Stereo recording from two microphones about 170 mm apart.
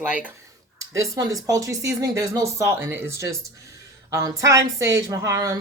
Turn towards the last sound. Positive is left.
turn(degrees=-20)  # may be behind; listen again after turning